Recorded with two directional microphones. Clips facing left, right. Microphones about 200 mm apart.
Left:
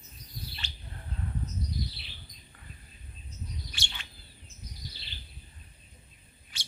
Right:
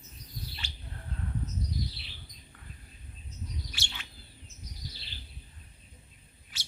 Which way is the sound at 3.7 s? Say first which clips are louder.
Even; 5° right (ahead or behind).